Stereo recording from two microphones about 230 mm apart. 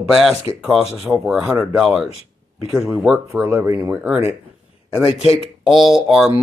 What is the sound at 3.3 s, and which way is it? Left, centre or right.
Speech, centre.